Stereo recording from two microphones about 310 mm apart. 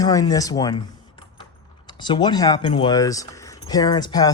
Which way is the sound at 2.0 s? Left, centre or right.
Centre.